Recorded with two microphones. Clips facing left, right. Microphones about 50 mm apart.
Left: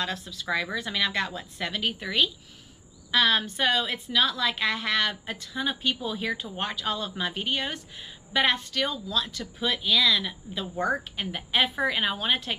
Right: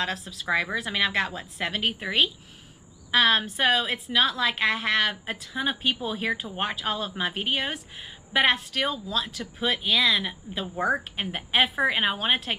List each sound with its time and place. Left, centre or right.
0.0 s a woman's voice: centre
0.5 s a woman's voice: right
11.1 s a woman's voice: right